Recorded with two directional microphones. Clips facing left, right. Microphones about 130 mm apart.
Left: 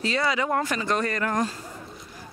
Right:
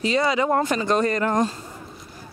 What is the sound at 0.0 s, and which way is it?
Speech, 20° right (ahead or behind).